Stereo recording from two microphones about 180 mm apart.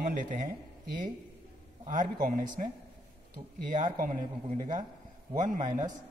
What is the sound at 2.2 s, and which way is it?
A man's voice, 50° right (ahead or behind).